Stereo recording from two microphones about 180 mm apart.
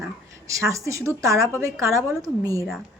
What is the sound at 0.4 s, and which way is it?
A woman's voice, 15° right (ahead or behind).